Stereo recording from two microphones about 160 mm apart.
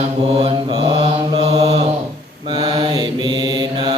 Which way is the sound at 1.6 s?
40° right (ahead or behind).